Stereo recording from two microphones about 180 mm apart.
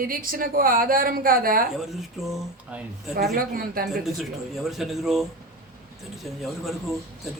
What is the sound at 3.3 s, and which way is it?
Speech, 55° right (ahead or behind).